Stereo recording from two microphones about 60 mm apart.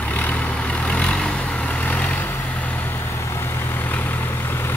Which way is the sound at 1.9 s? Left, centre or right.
Left.